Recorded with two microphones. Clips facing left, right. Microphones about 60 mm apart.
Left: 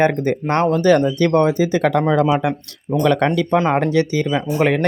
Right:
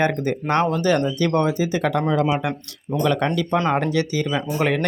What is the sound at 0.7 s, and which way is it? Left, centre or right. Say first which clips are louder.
Speech: left 5 dB; left.